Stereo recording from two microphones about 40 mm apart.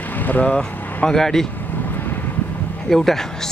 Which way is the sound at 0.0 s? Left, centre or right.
Left.